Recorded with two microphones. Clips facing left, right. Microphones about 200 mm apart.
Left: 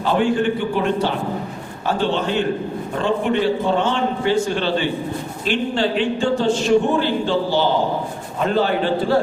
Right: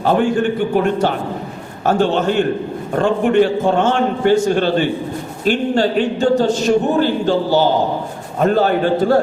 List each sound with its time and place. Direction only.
0.0 s a man's voice: 45° right (ahead or behind)